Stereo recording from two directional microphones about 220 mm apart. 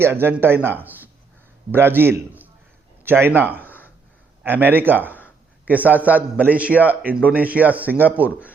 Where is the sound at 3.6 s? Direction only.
10° left (ahead or behind).